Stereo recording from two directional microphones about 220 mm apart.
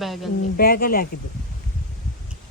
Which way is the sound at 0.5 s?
40° left (ahead or behind).